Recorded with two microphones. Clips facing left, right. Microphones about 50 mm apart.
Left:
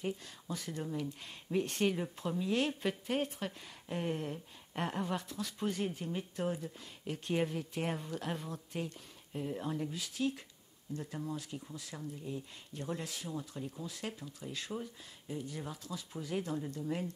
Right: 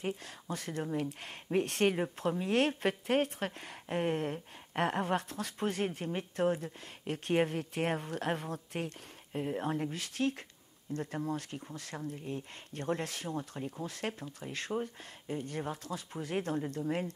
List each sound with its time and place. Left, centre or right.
0.0 s speech: right
2.0 s speech: right